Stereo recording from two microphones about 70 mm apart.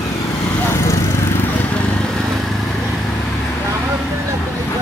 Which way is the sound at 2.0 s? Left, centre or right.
Centre.